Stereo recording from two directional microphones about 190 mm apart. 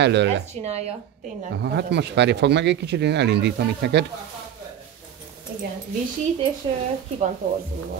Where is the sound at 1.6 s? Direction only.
60° right (ahead or behind).